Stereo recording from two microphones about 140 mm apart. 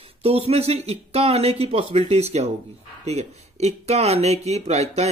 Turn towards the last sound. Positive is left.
turn(degrees=-50)  # may be behind; listen again after turning